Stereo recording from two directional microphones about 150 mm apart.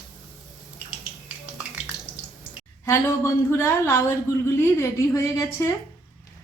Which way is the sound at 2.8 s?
15° left (ahead or behind).